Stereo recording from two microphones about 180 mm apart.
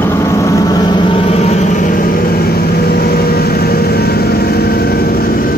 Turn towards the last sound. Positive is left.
turn(degrees=60)  # may be behind; listen again after turning